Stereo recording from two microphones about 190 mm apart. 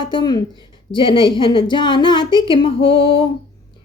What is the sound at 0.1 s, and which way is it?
Speech, 25° left (ahead or behind).